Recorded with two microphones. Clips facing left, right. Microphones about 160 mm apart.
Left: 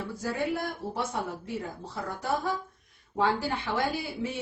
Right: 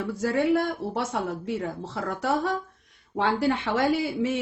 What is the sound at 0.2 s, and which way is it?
Speech, 90° right.